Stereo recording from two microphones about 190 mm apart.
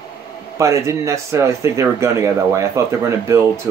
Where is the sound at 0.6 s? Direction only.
15° right (ahead or behind).